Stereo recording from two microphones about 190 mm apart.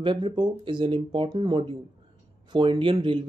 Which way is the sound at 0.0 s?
25° right (ahead or behind).